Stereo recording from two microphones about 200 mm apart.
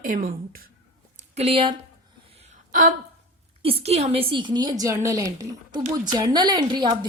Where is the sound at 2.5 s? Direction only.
40° right (ahead or behind).